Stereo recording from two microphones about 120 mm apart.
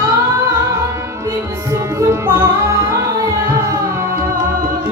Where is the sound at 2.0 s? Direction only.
20° right (ahead or behind).